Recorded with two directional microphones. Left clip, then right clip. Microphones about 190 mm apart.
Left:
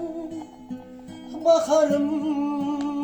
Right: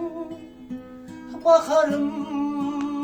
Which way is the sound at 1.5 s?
15° right (ahead or behind).